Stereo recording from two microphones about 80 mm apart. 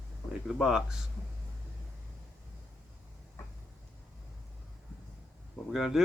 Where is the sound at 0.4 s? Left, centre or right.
Centre.